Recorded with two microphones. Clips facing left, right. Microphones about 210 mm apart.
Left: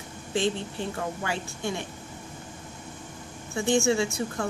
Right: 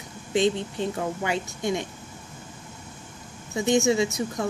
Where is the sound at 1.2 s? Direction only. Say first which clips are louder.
Right 4 dB; 15° right (ahead or behind).